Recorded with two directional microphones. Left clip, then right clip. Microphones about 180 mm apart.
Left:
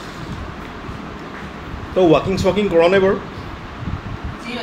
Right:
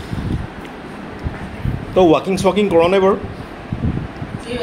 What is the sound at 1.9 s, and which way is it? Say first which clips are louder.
A man's voice: right 1 dB; 25° right (ahead or behind).